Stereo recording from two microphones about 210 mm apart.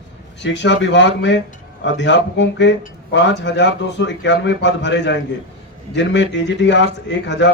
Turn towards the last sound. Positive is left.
turn(degrees=60)  # may be behind; listen again after turning